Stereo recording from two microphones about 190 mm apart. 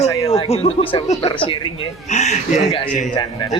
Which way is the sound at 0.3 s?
30° left (ahead or behind).